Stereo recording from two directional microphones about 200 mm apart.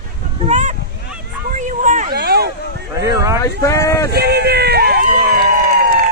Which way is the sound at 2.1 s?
50° right (ahead or behind).